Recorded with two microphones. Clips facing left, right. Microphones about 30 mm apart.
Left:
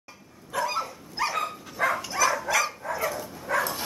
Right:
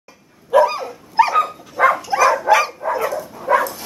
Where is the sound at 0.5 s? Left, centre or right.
Right.